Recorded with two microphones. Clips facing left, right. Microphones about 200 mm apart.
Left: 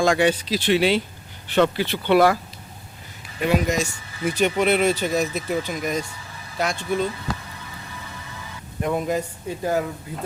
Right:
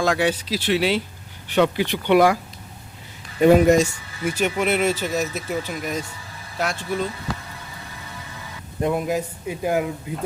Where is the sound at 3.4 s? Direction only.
45° right (ahead or behind).